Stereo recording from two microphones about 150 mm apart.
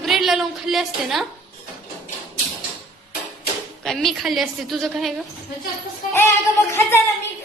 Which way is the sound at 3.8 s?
Centre (ahead or behind).